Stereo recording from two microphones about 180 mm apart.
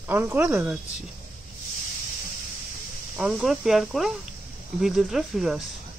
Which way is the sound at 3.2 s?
5° right (ahead or behind).